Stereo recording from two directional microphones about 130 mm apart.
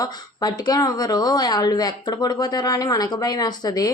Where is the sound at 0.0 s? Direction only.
30° left (ahead or behind).